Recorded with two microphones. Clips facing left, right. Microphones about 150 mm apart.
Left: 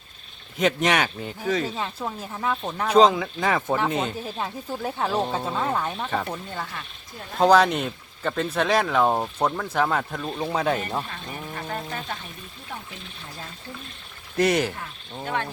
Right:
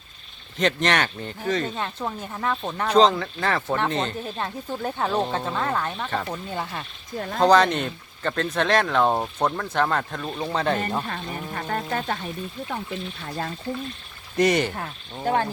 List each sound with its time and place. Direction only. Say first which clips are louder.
0.5 s speech: left 1 dB; 10° left (ahead or behind)
11.1 s speech: right 3 dB; 50° right (ahead or behind)
13.2 s speech: right 9 dB; 75° right (ahead or behind)
14.3 s speech: right 1 dB; centre (ahead or behind)
15.2 s speech: right 6 dB; 35° right (ahead or behind)